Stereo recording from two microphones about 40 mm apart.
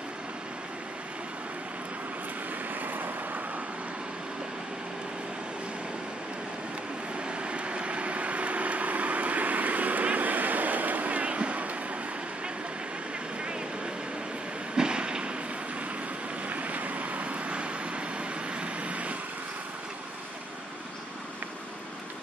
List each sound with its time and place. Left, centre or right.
2.7 s vehicle: right
7.2 s vehicle: right
14.8 s a sound: right
16.4 s vehicle: right